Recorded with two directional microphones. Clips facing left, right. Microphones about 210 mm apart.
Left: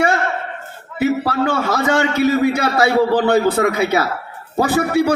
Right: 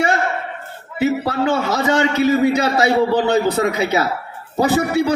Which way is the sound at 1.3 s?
20° right (ahead or behind).